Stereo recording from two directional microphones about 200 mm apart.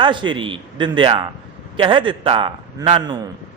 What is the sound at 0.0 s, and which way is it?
A man's voice, 25° right (ahead or behind).